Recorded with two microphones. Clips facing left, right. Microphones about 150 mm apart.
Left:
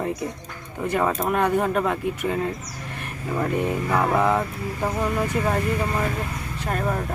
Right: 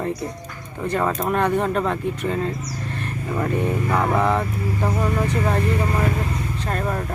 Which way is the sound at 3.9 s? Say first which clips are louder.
Even; centre (ahead or behind).